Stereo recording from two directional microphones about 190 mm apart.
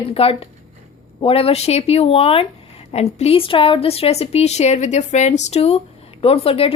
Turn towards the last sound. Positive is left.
turn(degrees=30)  # may be behind; listen again after turning